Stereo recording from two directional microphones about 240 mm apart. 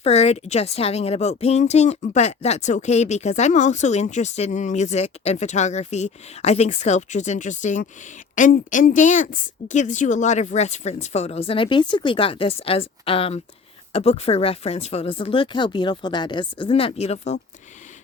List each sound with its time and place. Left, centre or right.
0.0 s speech: left